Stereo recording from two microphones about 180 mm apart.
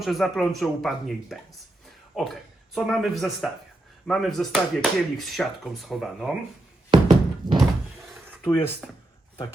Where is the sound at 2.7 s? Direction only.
Centre (ahead or behind).